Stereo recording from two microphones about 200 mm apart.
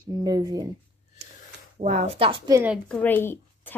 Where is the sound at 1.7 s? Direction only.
35° right (ahead or behind).